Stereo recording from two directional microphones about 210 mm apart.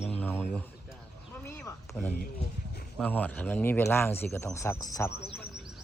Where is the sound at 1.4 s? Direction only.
10° left (ahead or behind).